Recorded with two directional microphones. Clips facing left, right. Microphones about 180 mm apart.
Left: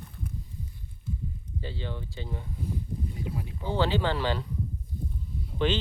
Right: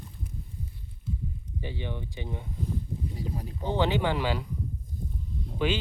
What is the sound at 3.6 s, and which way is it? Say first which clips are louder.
Speech: right 1 dB; 20° right (ahead or behind).